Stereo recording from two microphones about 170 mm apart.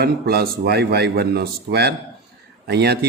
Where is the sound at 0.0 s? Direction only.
70° right (ahead or behind).